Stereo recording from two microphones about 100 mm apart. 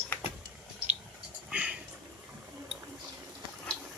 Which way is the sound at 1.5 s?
15° right (ahead or behind).